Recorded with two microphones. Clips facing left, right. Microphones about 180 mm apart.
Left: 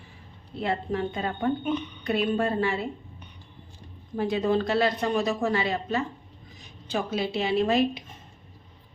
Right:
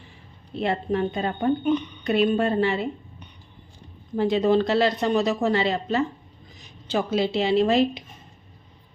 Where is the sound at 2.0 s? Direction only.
25° right (ahead or behind).